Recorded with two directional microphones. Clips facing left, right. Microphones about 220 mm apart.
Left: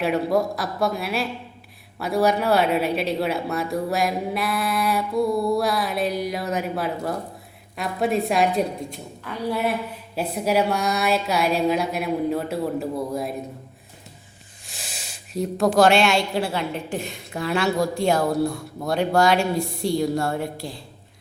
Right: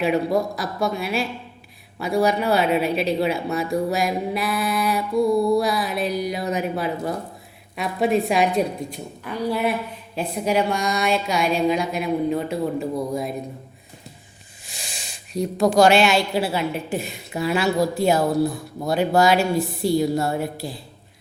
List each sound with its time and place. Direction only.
0.0 s speech: centre (ahead or behind)
9.3 s a woman's voice: 15° right (ahead or behind)
10.2 s speech: 5° left (ahead or behind)
14.7 s speech: 5° left (ahead or behind)